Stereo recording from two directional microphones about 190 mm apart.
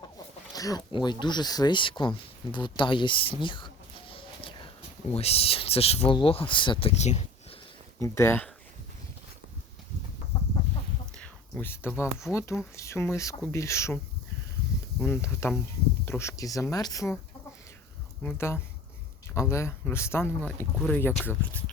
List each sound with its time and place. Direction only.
0.5 s speech: 20° left (ahead or behind)
4.1 s a sound: 25° left (ahead or behind)
5.1 s speech: 30° left (ahead or behind)
7.9 s speech: 15° left (ahead or behind)
11.2 s speech: 10° left (ahead or behind)
15.0 s speech: 15° left (ahead or behind)
18.2 s speech: 10° left (ahead or behind)